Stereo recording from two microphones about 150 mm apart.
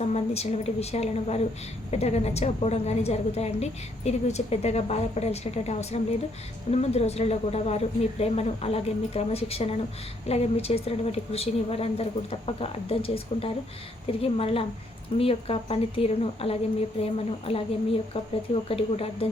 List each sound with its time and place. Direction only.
0.0 s a woman's voice: 45° left (ahead or behind)
18.7 s speech: 40° left (ahead or behind)